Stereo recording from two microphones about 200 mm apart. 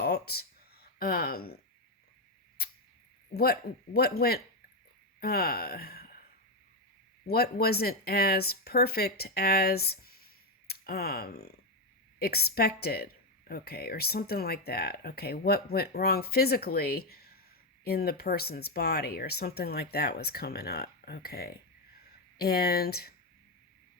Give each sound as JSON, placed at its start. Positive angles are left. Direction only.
{"t": 0.0, "sound": "a sound", "side_deg": 55}
{"t": 3.3, "sound": "speech", "side_deg": 50}
{"t": 7.3, "sound": "speech", "side_deg": 50}